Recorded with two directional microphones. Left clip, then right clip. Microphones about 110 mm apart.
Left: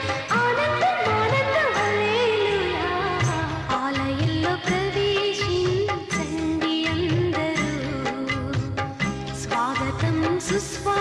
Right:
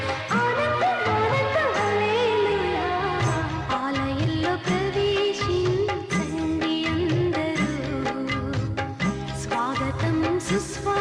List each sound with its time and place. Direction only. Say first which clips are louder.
0.3 s music: left 2 dB; 50° left (ahead or behind)
3.7 s music of bollywood: left 2 dB; 45° left (ahead or behind)
9.0 s music: even; 50° left (ahead or behind)